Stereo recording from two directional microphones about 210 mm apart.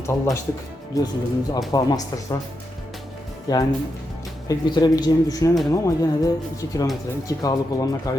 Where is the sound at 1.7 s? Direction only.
20° left (ahead or behind).